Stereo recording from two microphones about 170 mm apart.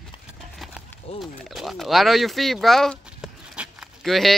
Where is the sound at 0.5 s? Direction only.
Centre (ahead or behind).